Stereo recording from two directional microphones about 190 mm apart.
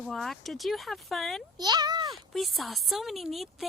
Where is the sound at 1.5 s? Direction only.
20° right (ahead or behind).